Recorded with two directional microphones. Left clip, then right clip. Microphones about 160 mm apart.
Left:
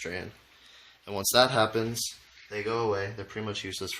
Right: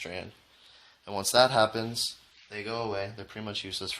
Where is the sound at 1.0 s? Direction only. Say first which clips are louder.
Even; 40° right (ahead or behind).